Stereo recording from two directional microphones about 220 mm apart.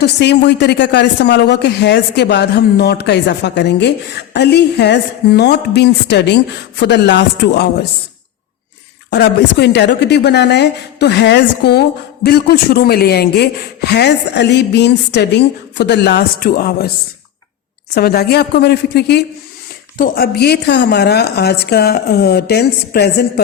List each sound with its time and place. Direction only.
0.0 s speech: 50° left (ahead or behind)
9.0 s speech: 50° left (ahead or behind)
17.9 s speech: 45° left (ahead or behind)